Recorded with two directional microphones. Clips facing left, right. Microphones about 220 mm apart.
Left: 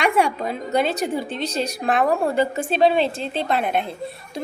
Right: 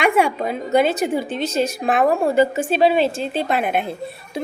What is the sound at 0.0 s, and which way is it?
A woman's voice, centre (ahead or behind).